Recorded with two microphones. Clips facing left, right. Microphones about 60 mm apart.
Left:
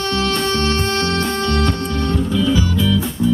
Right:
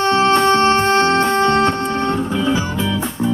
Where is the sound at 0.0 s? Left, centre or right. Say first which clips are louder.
Right 6 dB; right.